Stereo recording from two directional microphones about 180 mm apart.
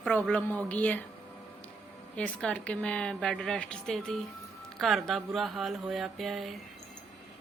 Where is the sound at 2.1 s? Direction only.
5° left (ahead or behind).